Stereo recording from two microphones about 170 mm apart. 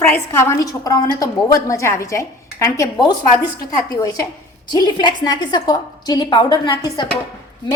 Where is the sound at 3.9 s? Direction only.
20° left (ahead or behind).